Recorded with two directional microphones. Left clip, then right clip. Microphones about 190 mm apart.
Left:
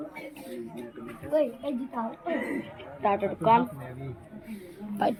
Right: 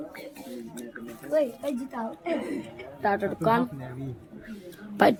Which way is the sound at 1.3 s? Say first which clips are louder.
Right 1 dB; 60° right (ahead or behind).